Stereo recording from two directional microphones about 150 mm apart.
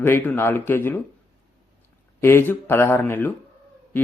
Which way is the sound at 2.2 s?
15° left (ahead or behind).